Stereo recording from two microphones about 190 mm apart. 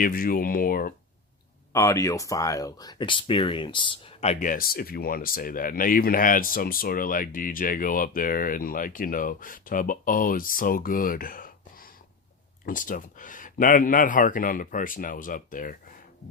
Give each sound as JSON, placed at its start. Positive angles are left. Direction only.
{"t": 0.0, "sound": "speech", "side_deg": 50}
{"t": 1.7, "sound": "speech", "side_deg": 15}